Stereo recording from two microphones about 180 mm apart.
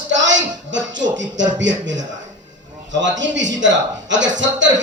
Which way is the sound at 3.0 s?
90° right.